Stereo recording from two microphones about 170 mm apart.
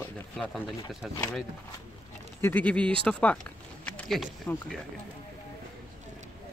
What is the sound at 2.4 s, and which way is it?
Speech, 10° left (ahead or behind).